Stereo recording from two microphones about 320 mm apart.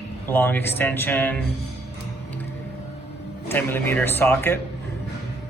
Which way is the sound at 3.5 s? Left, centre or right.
Centre.